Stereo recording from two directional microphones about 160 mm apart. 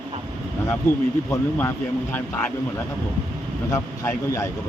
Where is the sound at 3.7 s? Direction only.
20° left (ahead or behind).